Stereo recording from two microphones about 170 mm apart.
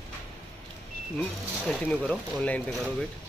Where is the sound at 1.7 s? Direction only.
5° left (ahead or behind).